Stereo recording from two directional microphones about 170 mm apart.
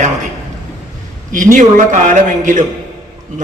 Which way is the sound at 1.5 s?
50° right (ahead or behind).